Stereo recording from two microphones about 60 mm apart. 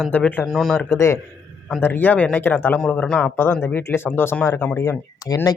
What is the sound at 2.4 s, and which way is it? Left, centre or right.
Speech, left.